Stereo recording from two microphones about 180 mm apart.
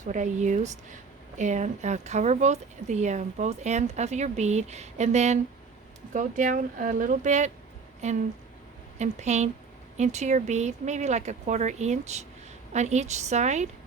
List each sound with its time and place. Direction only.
0.0 s speech: 45° right (ahead or behind)